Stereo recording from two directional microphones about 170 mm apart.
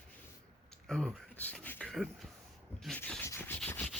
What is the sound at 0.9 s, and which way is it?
Speech, 5° left (ahead or behind).